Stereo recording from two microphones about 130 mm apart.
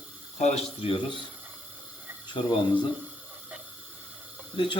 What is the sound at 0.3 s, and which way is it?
Speech, 60° left (ahead or behind).